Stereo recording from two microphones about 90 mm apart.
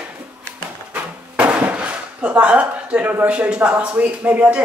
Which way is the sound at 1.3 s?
15° right (ahead or behind).